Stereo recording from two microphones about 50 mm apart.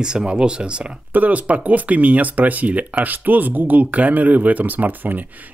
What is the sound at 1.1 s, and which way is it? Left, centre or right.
Speech, right.